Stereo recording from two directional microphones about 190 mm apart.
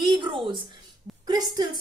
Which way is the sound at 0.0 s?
25° right (ahead or behind).